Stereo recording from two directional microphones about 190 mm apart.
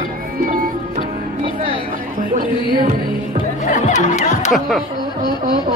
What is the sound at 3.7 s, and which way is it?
Music, 40° left (ahead or behind).